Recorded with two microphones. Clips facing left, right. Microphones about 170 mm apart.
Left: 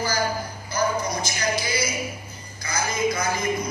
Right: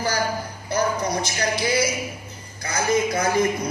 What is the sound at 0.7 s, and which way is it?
Music, 65° right (ahead or behind).